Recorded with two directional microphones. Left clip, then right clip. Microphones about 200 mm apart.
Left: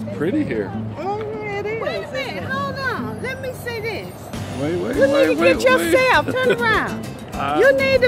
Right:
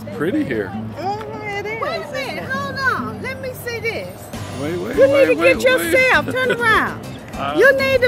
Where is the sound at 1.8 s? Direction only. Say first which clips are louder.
Right 1 dB; 25° right (ahead or behind).